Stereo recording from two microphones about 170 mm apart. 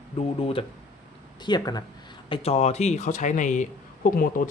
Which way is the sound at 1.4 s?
25° left (ahead or behind).